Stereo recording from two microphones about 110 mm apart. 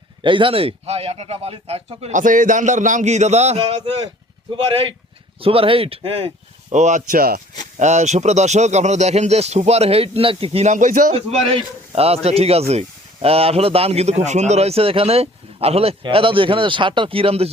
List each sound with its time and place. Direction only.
0.2 s speech: 50° right (ahead or behind); by 2.1 s 70° right (ahead or behind)
2.6 s a man's voice: 90° right; by 16.0 s 65° right (ahead or behind)
16.0 s speech: 50° right (ahead or behind)